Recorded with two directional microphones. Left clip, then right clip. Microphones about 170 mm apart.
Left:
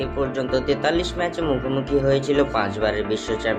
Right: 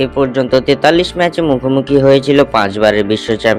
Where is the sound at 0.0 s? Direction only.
50° right (ahead or behind).